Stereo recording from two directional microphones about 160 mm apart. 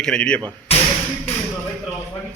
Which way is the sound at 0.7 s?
40° left (ahead or behind).